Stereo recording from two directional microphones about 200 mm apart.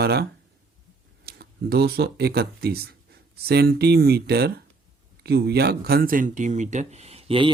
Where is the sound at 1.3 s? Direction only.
55° right (ahead or behind).